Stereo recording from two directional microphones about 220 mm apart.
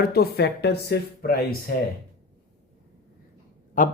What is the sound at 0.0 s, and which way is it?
Speech, 45° left (ahead or behind).